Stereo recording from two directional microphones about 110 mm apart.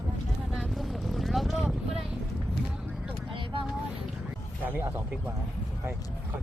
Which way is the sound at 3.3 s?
50° right (ahead or behind).